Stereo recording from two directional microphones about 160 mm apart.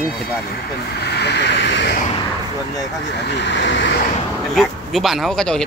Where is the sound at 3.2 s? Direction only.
90° left.